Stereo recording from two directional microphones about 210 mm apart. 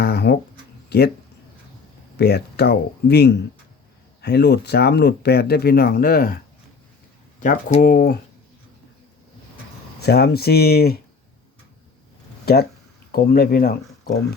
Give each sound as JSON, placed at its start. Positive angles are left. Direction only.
{"t": 0.0, "sound": "a sound", "side_deg": 50}
{"t": 0.9, "sound": "speech", "side_deg": 50}
{"t": 2.1, "sound": "speech", "side_deg": 50}
{"t": 7.4, "sound": "speech", "side_deg": 40}
{"t": 10.0, "sound": "speech", "side_deg": 50}
{"t": 13.1, "sound": "speech", "side_deg": 45}